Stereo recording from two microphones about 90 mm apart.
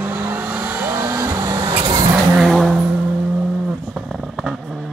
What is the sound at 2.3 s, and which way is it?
Vehicle, centre (ahead or behind).